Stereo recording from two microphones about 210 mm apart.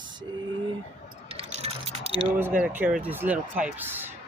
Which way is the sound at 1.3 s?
30° right (ahead or behind).